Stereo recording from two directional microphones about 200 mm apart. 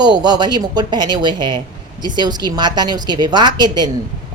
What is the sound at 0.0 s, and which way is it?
A woman's voice, 20° right (ahead or behind).